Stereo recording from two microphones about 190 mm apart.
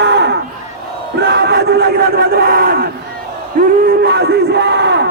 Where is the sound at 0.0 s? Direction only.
65° right (ahead or behind).